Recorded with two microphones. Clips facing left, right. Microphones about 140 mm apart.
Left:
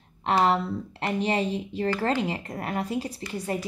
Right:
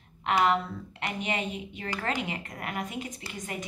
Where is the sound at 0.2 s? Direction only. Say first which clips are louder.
Left 2 dB; 35° left (ahead or behind).